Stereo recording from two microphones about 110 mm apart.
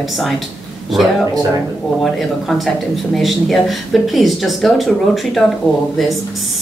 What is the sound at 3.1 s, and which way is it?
A woman's voice, centre (ahead or behind).